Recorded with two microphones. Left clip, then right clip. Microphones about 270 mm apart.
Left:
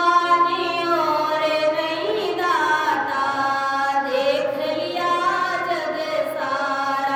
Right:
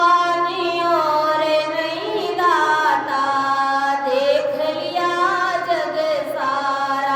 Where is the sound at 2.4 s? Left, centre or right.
Centre.